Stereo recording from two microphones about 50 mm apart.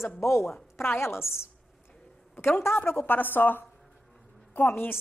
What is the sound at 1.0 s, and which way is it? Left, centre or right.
Speech, left.